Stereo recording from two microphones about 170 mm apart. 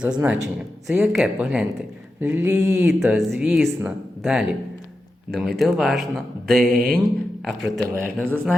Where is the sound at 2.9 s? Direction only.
Centre (ahead or behind).